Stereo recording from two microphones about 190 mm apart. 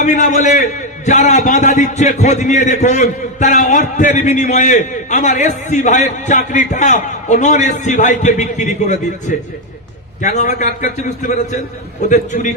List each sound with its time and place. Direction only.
0.0 s a man's voice: 40° left (ahead or behind)
10.2 s a man's voice: 40° left (ahead or behind)